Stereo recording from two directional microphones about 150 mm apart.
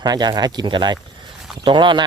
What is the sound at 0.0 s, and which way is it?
Speech, 25° right (ahead or behind).